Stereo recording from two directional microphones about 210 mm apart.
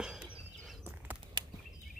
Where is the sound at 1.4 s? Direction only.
20° right (ahead or behind).